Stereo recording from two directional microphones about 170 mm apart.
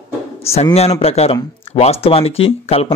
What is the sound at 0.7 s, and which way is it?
Speech, 35° left (ahead or behind).